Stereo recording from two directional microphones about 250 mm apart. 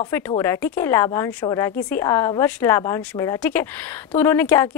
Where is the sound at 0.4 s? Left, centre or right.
Centre.